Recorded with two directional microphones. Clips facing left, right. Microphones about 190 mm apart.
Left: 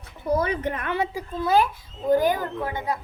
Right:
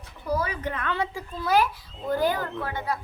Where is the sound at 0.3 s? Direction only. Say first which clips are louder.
Left 4 dB; 25° left (ahead or behind).